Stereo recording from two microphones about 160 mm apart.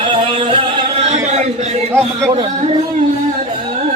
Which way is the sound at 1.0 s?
45° right (ahead or behind).